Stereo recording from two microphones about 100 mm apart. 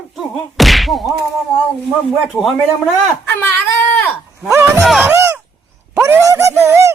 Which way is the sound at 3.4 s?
20° left (ahead or behind).